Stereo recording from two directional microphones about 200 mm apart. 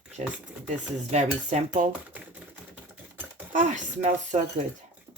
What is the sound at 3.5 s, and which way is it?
Speech, 40° right (ahead or behind).